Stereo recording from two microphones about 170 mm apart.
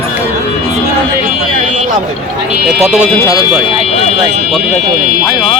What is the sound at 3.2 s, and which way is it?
Speech, 20° left (ahead or behind).